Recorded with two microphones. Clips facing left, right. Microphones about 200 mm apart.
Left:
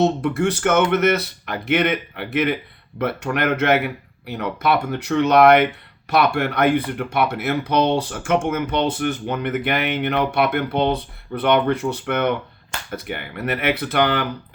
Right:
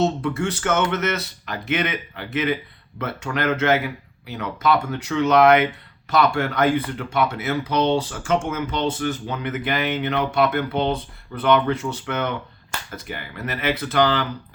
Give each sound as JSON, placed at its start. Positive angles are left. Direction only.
{"t": 0.0, "sound": "speech", "side_deg": 60}